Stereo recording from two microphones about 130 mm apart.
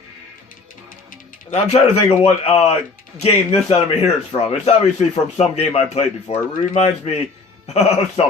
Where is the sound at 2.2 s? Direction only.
50° left (ahead or behind).